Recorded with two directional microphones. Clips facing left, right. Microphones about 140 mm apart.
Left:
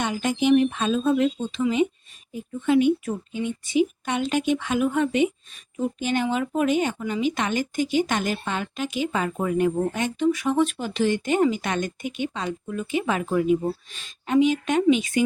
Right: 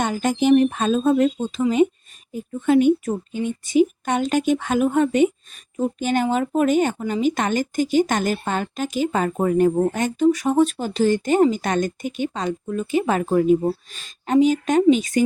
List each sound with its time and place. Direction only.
0.0 s a woman's voice: 45° right (ahead or behind)